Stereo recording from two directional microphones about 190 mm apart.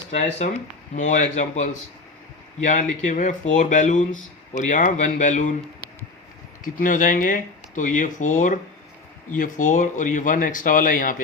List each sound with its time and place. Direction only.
0.1 s speech: 35° left (ahead or behind)
6.7 s speech: 45° left (ahead or behind)